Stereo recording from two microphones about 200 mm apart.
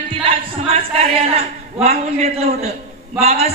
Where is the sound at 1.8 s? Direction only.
30° right (ahead or behind).